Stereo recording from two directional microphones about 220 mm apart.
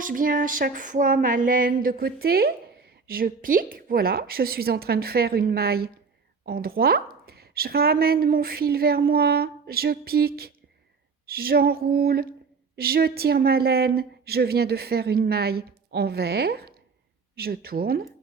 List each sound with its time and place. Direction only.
0.0 s female singing: 40° right (ahead or behind)
3.1 s a woman's voice: 40° right (ahead or behind)